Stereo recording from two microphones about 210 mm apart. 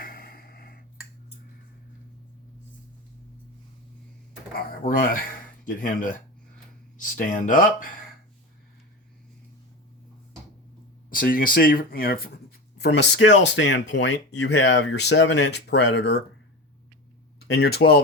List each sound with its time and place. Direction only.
0.0 s a sound: 45° left (ahead or behind)
5.6 s speech: 40° left (ahead or behind)
11.1 s speech: 40° left (ahead or behind)
17.5 s speech: 50° left (ahead or behind)